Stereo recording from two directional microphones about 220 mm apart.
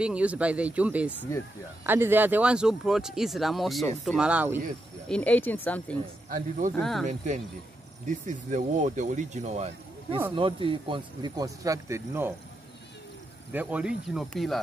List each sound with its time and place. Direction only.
0.0 s speech: 5° right (ahead or behind)
5.0 s speech: 5° left (ahead or behind)
6.2 s speech: 35° right (ahead or behind)
6.8 s speech: centre (ahead or behind)
8.3 s speech: 35° right (ahead or behind); by 12.4 s 10° right (ahead or behind)
13.5 s speech: 5° right (ahead or behind)